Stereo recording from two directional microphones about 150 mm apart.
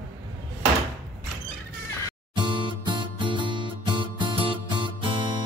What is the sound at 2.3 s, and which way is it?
Music, 30° right (ahead or behind).